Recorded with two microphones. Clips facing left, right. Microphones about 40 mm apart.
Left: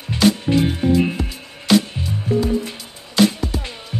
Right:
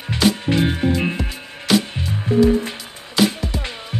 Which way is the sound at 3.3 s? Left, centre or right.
Centre.